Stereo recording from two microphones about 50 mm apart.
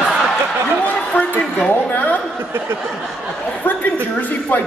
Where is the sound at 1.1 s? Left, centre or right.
Left.